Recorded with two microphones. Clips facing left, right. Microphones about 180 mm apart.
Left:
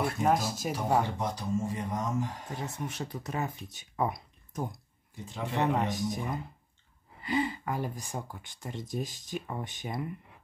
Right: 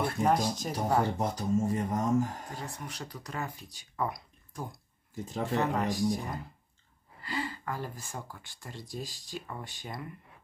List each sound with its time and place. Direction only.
0.2 s speech: 5° left (ahead or behind)
1.2 s speech: 45° right (ahead or behind)
2.5 s speech: 25° left (ahead or behind)
5.1 s speech: 45° right (ahead or behind)
5.6 s speech: 20° left (ahead or behind)